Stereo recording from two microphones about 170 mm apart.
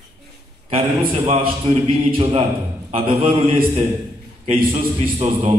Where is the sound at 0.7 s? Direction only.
35° right (ahead or behind).